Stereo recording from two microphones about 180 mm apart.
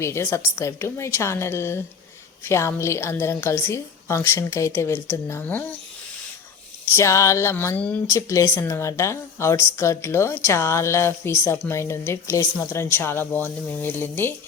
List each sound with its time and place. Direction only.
0.0 s a woman's voice: 15° left (ahead or behind)
6.8 s a woman's voice: 15° left (ahead or behind)